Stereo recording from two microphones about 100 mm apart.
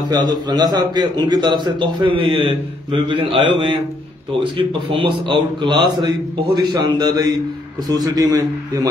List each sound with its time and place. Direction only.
0.1 s a man's voice: 45° right (ahead or behind)